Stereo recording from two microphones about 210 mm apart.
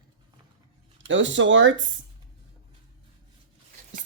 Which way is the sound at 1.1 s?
60° right (ahead or behind).